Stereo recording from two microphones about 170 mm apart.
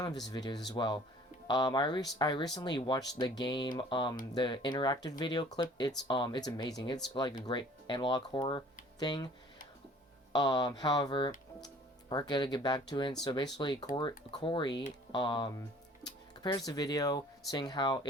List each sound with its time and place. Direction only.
0.0 s speech: 25° left (ahead or behind)
10.3 s speech: 25° left (ahead or behind)